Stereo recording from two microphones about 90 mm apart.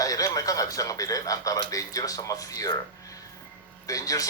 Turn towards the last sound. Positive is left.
turn(degrees=40)  # may be behind; listen again after turning